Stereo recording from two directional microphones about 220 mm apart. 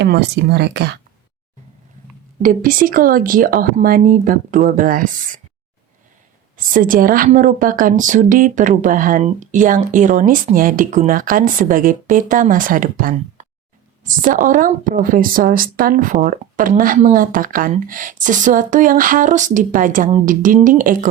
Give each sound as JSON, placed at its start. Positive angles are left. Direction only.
{"t": 0.0, "sound": "speech", "side_deg": -50}
{"t": 2.4, "sound": "a woman's voice", "side_deg": -40}
{"t": 6.6, "sound": "a woman's voice", "side_deg": -40}